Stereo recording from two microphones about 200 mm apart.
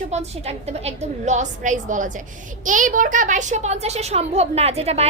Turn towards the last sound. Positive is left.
turn(degrees=-30)  # may be behind; listen again after turning